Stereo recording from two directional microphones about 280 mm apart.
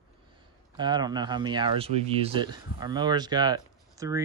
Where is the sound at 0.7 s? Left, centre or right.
Centre.